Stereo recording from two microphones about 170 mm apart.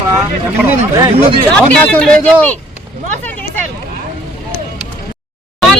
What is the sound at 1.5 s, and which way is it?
Speech, 5° left (ahead or behind).